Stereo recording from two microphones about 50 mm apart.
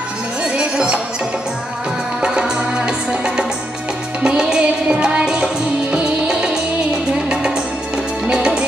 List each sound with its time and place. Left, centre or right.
0.6 s music: right
2.2 s music: centre
8.3 s music: right